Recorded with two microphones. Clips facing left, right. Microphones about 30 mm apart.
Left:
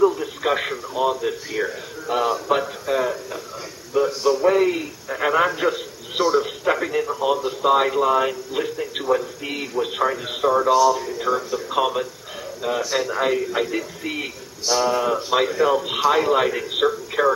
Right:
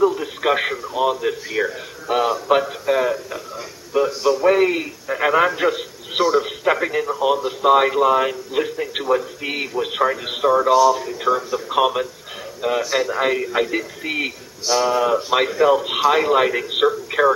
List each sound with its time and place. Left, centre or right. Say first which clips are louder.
0.0 s a man's voice: right 1 dB; centre
5.6 s a sound: right 2 dB; centre
6.4 s speech: right 2 dB; centre
9.5 s speech: right 2 dB; right; by 11.8 s centre
11.8 s speech: right 5 dB; right
13.2 s speech: right 2 dB; right
14.7 s speech: right 2 dB; centre
16.8 s a sound: right 3 dB; centre